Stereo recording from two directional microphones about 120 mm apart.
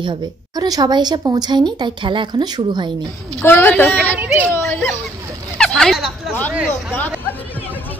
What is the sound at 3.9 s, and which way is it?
Speech, 15° right (ahead or behind).